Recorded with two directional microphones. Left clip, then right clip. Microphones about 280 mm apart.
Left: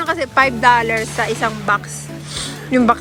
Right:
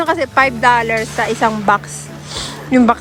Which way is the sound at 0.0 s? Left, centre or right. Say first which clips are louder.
Right 2 dB; centre.